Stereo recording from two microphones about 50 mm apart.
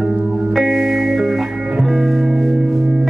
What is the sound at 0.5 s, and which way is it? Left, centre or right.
Music, centre.